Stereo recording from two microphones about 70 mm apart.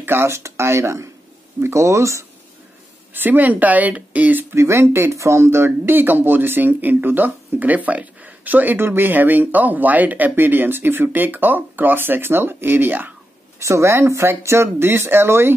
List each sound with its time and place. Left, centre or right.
0.0 s speech: right
3.1 s speech: right
4.6 s speech: right
13.6 s speech: right